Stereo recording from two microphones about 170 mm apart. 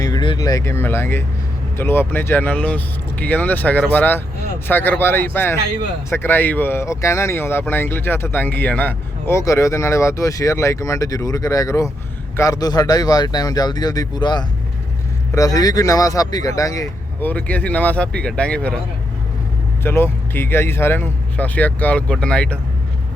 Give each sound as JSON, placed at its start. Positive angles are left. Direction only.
{"t": 0.0, "sound": "speech", "side_deg": 25}
{"t": 19.8, "sound": "speech", "side_deg": 15}